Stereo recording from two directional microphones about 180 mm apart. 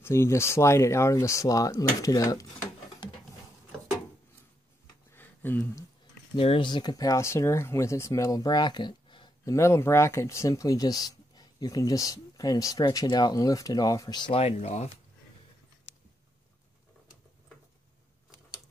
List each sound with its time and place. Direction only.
0.0 s speech: 15° left (ahead or behind)
5.1 s a sound: 10° left (ahead or behind)
6.3 s speech: 30° left (ahead or behind)